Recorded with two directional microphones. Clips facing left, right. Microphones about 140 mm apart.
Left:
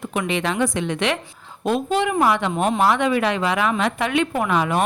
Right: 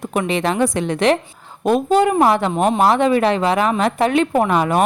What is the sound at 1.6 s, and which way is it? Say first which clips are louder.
A woman's voice: right 6 dB; 45° right (ahead or behind).